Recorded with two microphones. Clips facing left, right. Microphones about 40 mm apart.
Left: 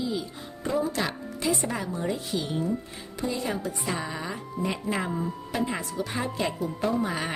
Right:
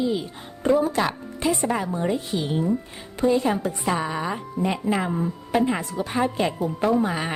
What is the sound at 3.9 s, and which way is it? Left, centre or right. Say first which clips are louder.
Speech: right 8 dB; right.